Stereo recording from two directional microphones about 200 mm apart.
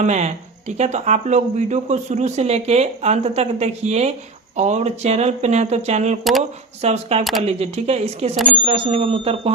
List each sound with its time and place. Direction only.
0.0 s speech: 35° right (ahead or behind)